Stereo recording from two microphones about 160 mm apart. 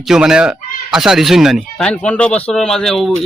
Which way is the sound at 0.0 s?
5° right (ahead or behind).